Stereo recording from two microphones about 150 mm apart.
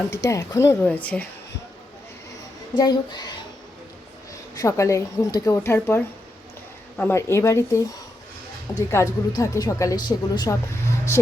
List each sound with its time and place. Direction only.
0.1 s speech: 20° left (ahead or behind)
2.7 s speech: 25° left (ahead or behind)